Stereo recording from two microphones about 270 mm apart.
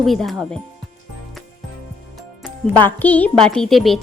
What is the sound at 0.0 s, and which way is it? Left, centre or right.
Speech, centre.